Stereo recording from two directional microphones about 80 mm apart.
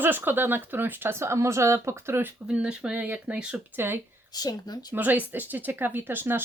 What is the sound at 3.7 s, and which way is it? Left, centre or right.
Speech, right.